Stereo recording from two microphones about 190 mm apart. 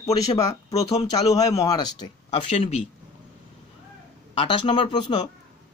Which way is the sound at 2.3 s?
30° left (ahead or behind).